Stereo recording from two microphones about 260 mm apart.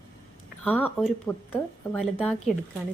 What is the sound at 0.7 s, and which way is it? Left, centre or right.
A woman's voice, centre.